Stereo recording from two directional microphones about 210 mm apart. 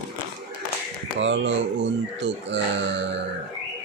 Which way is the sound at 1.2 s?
60° right (ahead or behind).